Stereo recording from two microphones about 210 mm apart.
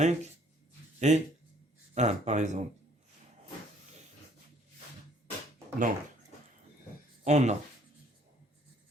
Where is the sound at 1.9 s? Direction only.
35° right (ahead or behind).